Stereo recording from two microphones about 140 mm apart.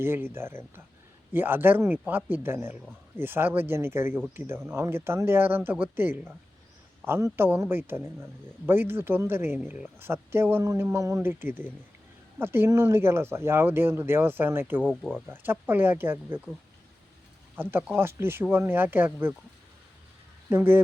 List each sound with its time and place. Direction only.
0.0 s a man's voice: 15° right (ahead or behind)
14.8 s speech: centre (ahead or behind)
15.3 s a man's voice: 15° right (ahead or behind)
17.6 s a man's voice: 15° right (ahead or behind)
20.5 s a man's voice: 15° right (ahead or behind)